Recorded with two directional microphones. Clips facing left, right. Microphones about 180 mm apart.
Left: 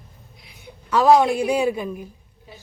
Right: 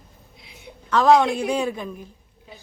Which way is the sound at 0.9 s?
10° left (ahead or behind).